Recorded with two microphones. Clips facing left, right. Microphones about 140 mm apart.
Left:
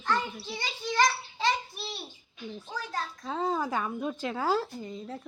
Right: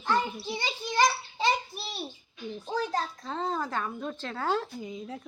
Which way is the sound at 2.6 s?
25° right (ahead or behind).